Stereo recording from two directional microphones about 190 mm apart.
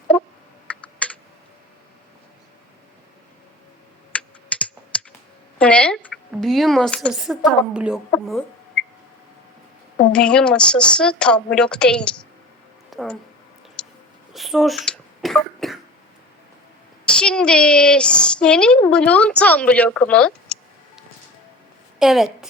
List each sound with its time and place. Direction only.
0.7 s computer keyboard: 5° left (ahead or behind)
4.1 s computer keyboard: 5° left (ahead or behind)
5.5 s a sound: 5° left (ahead or behind)
6.3 s a woman's voice: centre (ahead or behind)
8.1 s a sound: 5° left (ahead or behind)
10.1 s a woman's voice: 5° left (ahead or behind)
12.9 s a sound: centre (ahead or behind)
14.3 s throat clearing: centre (ahead or behind)
17.1 s a woman's voice: 5° left (ahead or behind)